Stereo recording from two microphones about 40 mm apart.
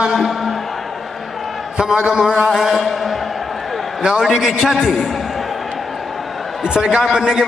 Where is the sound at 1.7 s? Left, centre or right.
Right; by 3.1 s centre.